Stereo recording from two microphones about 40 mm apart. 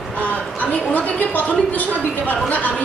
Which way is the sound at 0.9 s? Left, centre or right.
Left.